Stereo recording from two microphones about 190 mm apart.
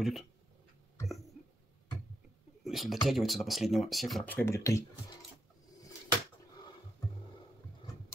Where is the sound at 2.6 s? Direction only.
Centre (ahead or behind); by 4.8 s 15° left (ahead or behind).